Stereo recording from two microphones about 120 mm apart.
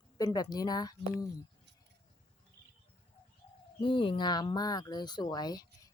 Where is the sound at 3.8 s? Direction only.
45° left (ahead or behind).